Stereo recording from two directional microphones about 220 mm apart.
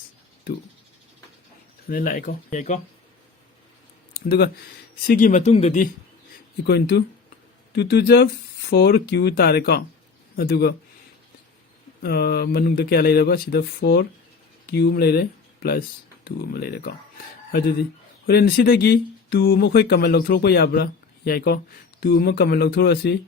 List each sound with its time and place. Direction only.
1.9 s speech: 40° left (ahead or behind)
4.1 s speech: 45° left (ahead or behind)
6.6 s speech: 50° left (ahead or behind)
12.0 s speech: 45° left (ahead or behind)
18.3 s speech: 45° left (ahead or behind)